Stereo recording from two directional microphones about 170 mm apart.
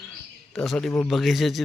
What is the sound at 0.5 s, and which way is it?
A man's voice, centre (ahead or behind).